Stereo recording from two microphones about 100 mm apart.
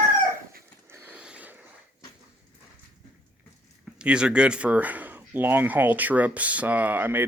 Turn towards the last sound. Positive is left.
turn(degrees=-20)  # may be behind; listen again after turning